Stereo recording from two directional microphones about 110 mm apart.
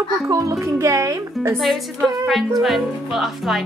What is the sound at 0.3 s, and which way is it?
Speech, 30° right (ahead or behind).